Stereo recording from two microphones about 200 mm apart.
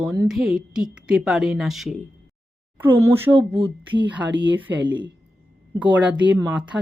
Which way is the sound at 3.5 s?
25° right (ahead or behind).